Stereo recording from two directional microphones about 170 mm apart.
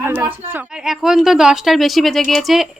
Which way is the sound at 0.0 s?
10° right (ahead or behind).